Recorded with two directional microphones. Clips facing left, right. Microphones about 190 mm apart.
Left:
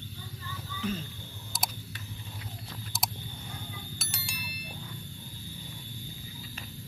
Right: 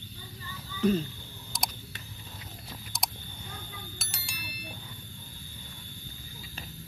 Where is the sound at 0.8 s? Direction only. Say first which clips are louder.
Right 9 dB; 40° right (ahead or behind).